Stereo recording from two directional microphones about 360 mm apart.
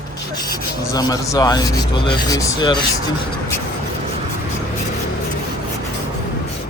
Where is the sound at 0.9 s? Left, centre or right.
Centre.